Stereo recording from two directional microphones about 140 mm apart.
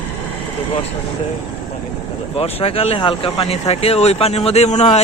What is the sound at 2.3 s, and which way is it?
Speech, 45° left (ahead or behind).